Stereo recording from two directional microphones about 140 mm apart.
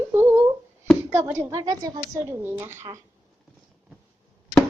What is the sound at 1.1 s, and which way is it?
A woman's voice, 20° right (ahead or behind).